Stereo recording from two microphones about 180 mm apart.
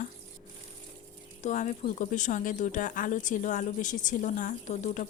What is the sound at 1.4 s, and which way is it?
Speech, 45° left (ahead or behind).